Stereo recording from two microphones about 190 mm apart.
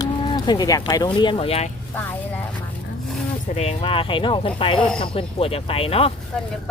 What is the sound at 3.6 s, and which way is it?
Speech, 30° left (ahead or behind).